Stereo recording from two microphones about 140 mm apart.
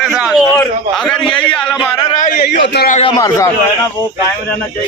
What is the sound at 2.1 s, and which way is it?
Speech, 65° left (ahead or behind).